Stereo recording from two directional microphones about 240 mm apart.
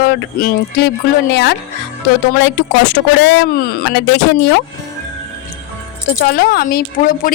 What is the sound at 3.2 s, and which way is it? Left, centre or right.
Speech, left.